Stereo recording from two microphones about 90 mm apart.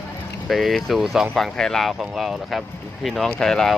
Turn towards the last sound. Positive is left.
turn(degrees=5)  # may be behind; listen again after turning